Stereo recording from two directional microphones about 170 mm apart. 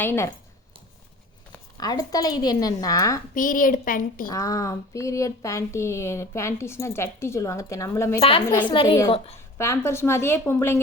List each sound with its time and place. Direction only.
0.0 s speech: 10° left (ahead or behind)
1.8 s speech: 20° left (ahead or behind)
3.3 s a woman's voice: 55° left (ahead or behind)
4.3 s speech: 20° left (ahead or behind)
8.2 s a woman's voice: 30° left (ahead or behind)
9.6 s speech: 15° left (ahead or behind)